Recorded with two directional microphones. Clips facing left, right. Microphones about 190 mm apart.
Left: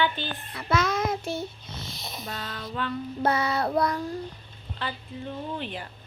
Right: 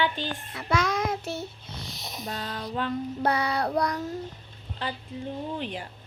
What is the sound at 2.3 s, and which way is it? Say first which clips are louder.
Bird: right 3 dB; 40° right (ahead or behind).